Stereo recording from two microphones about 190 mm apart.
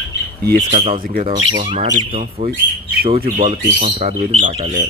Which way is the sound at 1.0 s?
50° right (ahead or behind).